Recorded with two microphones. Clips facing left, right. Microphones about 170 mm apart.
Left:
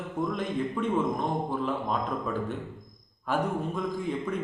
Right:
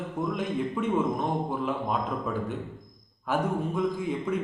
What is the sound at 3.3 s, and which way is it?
A man's voice, 5° right (ahead or behind).